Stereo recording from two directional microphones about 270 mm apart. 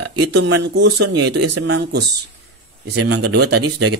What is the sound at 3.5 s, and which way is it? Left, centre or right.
Speech, right.